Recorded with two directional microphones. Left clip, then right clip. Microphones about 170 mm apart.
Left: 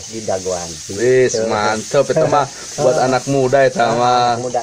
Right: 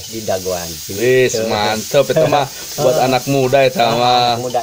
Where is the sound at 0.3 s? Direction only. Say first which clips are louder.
Right 1 dB; 15° right (ahead or behind).